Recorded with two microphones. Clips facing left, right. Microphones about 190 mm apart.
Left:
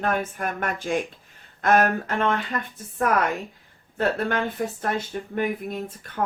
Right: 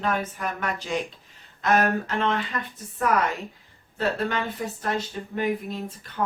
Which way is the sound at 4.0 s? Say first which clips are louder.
Left 2 dB; 50° left (ahead or behind).